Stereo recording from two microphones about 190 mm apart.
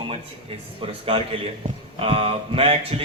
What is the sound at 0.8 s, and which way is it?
A man's voice, 30° right (ahead or behind).